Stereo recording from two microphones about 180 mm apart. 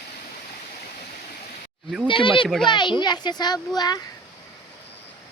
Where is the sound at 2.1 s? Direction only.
30° left (ahead or behind).